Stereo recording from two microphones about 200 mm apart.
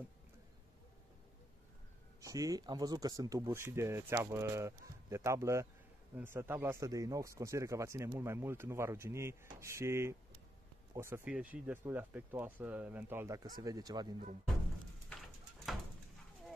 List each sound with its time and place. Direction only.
2.2 s speech: 15° right (ahead or behind)
15.0 s pigeon: centre (ahead or behind)